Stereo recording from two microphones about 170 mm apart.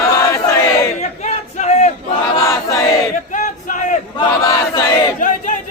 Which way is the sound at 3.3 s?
50° left (ahead or behind).